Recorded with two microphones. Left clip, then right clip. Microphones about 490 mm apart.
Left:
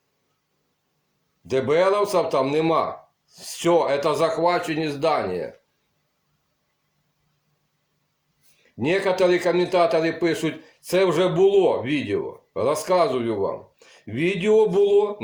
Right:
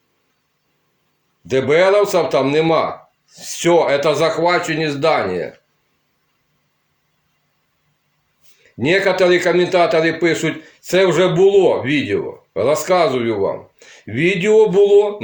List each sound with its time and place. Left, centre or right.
1.5 s a man's voice: left
8.8 s a man's voice: left